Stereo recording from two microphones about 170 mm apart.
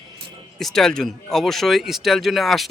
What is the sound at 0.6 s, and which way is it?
Speech, centre (ahead or behind).